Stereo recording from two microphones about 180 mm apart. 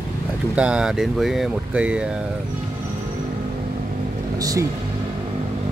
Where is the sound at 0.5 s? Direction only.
5° right (ahead or behind).